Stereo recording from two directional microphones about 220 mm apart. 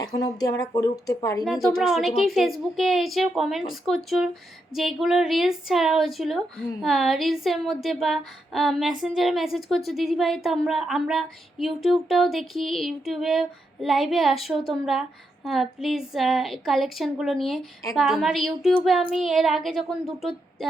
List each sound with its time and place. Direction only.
0.0 s speech: 20° left (ahead or behind)
1.6 s a woman's voice: centre (ahead or behind)